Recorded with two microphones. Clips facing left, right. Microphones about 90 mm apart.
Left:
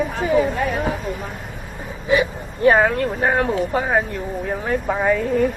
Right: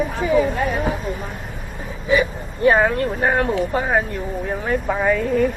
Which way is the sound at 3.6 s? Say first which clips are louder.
Even; 25° left (ahead or behind).